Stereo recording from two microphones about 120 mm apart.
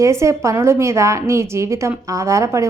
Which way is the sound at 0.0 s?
25° right (ahead or behind).